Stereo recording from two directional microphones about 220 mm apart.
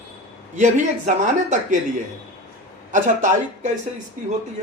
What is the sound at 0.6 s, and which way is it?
Speech, 35° right (ahead or behind).